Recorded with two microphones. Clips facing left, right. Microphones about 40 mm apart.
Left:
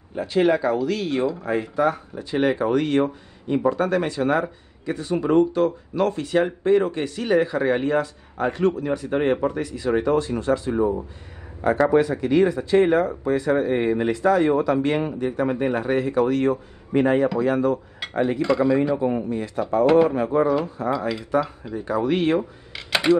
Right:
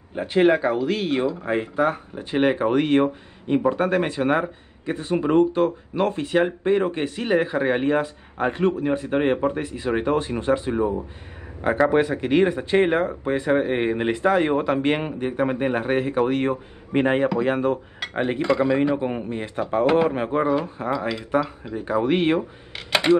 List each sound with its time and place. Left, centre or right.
0.1 s speech: right
11.9 s speech: right
22.8 s a sound: right